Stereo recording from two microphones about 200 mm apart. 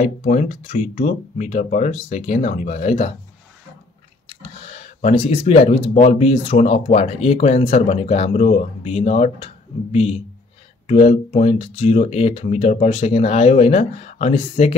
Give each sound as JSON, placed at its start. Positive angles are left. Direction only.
{"t": 0.0, "sound": "speech", "side_deg": 35}
{"t": 4.3, "sound": "speech", "side_deg": 30}